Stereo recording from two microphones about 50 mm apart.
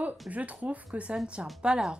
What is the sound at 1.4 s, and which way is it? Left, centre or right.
Speech, centre.